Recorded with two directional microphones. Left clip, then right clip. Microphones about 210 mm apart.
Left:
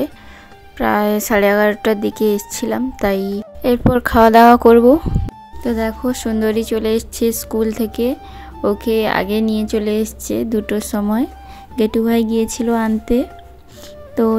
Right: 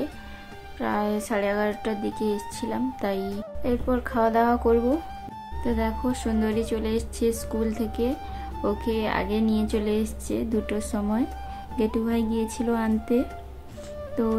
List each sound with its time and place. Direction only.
0.7 s speech: 40° left (ahead or behind)
5.6 s speech: 35° left (ahead or behind)